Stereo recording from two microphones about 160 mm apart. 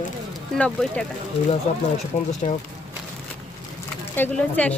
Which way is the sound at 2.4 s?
50° left (ahead or behind).